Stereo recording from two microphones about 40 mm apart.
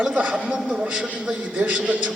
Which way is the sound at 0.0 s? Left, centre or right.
Right.